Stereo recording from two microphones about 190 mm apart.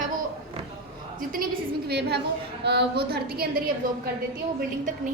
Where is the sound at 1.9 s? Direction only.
60° right (ahead or behind).